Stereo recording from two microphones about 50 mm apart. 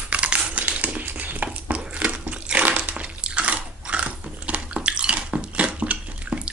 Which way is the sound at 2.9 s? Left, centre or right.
Right.